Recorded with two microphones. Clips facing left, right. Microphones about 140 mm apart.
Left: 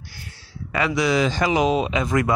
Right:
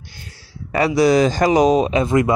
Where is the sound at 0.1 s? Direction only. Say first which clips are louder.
Right 1 dB; 30° right (ahead or behind).